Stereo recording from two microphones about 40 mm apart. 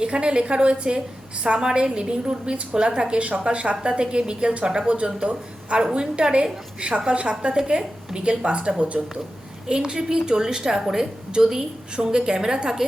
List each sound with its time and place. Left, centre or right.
0.0 s a woman's voice: right
3.2 s a woman's voice: right
8.9 s a woman's voice: centre